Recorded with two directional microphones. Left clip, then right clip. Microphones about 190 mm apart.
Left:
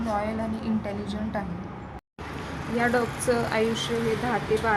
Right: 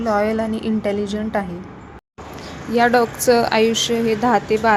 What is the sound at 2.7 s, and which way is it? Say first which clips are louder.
Speech: right 10 dB; 40° right (ahead or behind).